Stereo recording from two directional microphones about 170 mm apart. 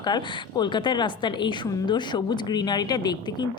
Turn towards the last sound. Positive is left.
turn(degrees=25)  # may be behind; listen again after turning